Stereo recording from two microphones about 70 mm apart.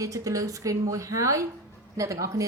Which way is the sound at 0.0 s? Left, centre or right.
Right.